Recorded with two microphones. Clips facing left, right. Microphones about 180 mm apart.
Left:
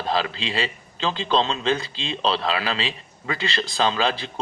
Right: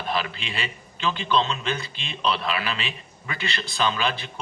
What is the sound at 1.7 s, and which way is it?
Speech, 90° left.